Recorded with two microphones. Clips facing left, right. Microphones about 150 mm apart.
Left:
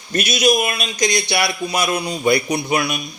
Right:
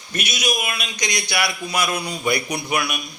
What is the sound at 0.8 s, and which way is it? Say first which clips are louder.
A man's voice: left 7 dB; 30° left (ahead or behind).